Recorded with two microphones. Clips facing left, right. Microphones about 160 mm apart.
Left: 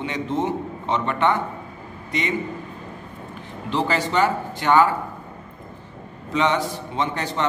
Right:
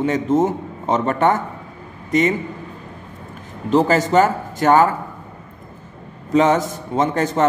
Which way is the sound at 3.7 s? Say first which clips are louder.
Right 7 dB; 45° right (ahead or behind).